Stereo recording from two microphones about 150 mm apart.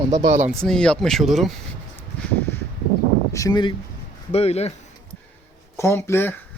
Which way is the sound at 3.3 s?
25° left (ahead or behind).